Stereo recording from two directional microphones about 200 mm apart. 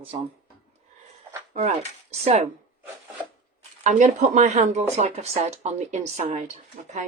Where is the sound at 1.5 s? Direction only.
30° right (ahead or behind).